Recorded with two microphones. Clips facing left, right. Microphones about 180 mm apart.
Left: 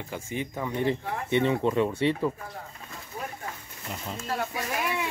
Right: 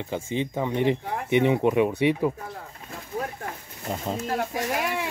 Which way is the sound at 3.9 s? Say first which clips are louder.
Right 5 dB; 40° right (ahead or behind).